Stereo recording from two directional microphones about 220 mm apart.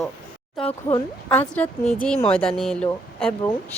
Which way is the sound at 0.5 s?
5° left (ahead or behind).